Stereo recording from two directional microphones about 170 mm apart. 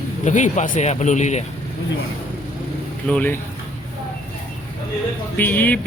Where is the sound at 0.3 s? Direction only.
45° left (ahead or behind).